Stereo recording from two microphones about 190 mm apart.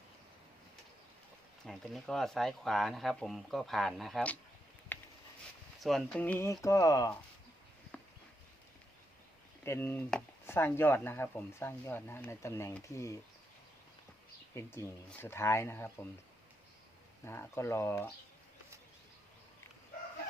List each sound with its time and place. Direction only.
1.6 s speech: centre (ahead or behind)
4.9 s a sound: 10° left (ahead or behind)
5.8 s speech: 5° left (ahead or behind); by 7.2 s 20° left (ahead or behind)
7.9 s a sound: 10° left (ahead or behind)
9.6 s speech: 10° left (ahead or behind)
14.5 s speech: 15° left (ahead or behind)
17.2 s speech: 15° left (ahead or behind)